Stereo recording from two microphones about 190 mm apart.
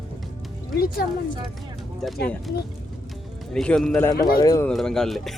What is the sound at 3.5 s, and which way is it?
Speech, 5° left (ahead or behind).